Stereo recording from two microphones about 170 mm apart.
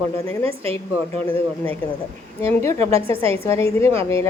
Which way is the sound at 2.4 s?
15° left (ahead or behind).